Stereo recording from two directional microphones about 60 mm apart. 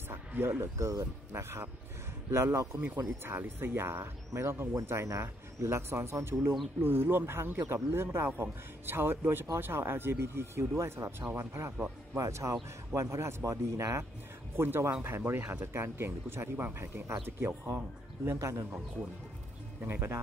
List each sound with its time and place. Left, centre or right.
0.1 s speech: right
3.3 s speech: right
14.6 s speech: right
19.8 s speech: right